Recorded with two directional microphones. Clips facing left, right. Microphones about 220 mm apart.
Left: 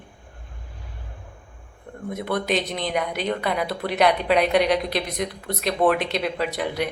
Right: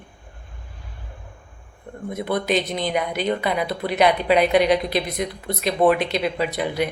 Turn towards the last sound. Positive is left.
turn(degrees=0)  # may be behind; listen again after turning